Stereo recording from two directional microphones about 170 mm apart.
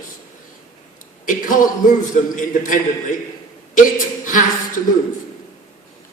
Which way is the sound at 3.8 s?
50° left (ahead or behind).